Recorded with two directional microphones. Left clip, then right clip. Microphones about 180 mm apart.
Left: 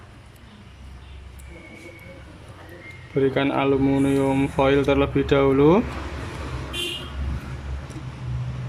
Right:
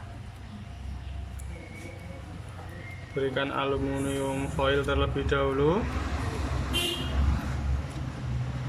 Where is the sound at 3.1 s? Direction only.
25° left (ahead or behind).